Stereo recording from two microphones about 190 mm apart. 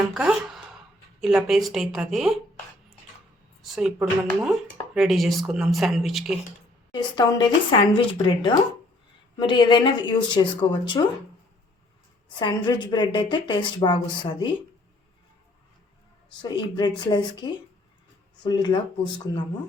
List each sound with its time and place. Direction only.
0.1 s speech: 5° right (ahead or behind)
3.6 s speech: centre (ahead or behind)
6.9 s a woman's voice: 25° left (ahead or behind)
12.3 s a woman's voice: 25° left (ahead or behind)
16.4 s a woman's voice: 20° left (ahead or behind)